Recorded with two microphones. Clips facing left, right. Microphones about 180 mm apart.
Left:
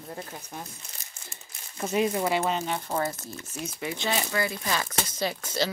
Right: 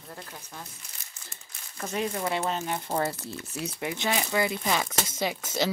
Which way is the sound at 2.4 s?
Centre (ahead or behind).